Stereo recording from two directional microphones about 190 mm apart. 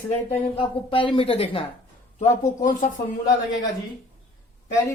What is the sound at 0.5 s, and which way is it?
A woman's voice, 30° left (ahead or behind).